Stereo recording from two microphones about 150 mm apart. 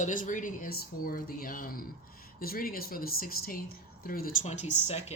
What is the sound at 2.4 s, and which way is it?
Speech, 80° left.